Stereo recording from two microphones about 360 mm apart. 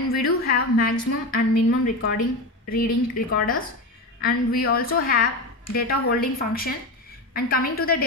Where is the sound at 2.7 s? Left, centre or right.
Left.